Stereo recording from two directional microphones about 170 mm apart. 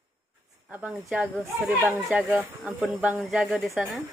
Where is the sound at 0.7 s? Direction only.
10° right (ahead or behind).